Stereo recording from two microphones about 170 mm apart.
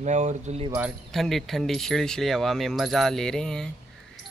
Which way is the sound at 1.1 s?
Centre (ahead or behind).